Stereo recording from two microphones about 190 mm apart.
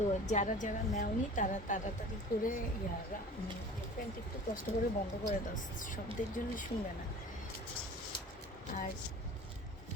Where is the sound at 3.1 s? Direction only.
45° left (ahead or behind).